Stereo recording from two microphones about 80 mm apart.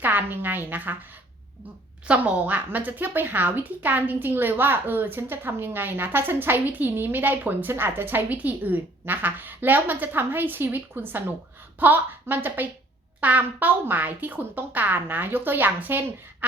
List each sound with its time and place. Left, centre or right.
0.0 s a woman's voice: right
2.0 s a woman's voice: centre